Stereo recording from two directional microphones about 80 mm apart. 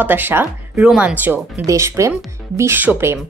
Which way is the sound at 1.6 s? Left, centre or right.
Right.